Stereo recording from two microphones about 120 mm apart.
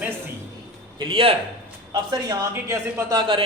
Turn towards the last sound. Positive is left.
turn(degrees=-45)  # may be behind; listen again after turning